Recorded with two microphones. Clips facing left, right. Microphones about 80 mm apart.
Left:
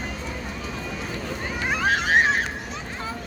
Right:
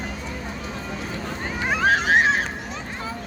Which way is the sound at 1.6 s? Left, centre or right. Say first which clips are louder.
Right 3 dB; centre.